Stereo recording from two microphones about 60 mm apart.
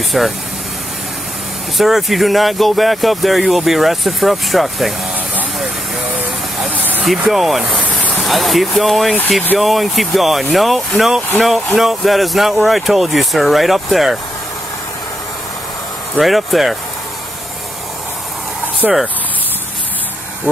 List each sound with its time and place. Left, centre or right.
0.1 s speech: centre
1.8 s speech: centre
6.8 s vehicle: right
7.1 s speech: centre
16.2 s speech: centre
18.8 s speech: centre